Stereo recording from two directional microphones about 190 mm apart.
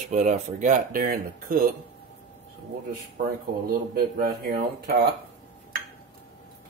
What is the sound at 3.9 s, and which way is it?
Speech, 50° right (ahead or behind).